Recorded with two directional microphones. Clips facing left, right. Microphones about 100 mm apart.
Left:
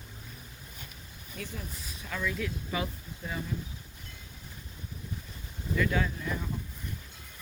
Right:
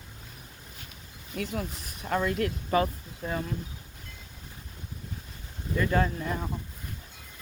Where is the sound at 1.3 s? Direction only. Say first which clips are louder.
Right 8 dB; 70° right (ahead or behind); by 3.4 s 45° right (ahead or behind).